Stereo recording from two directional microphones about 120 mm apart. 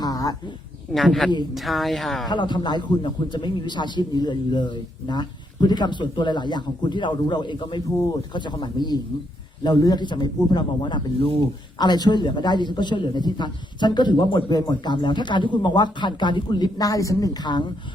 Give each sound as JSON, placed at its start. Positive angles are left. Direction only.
{"t": 0.0, "sound": "a sound", "side_deg": 30}
{"t": 0.9, "sound": "speech", "side_deg": 0}
{"t": 2.3, "sound": "a man's voice", "side_deg": 40}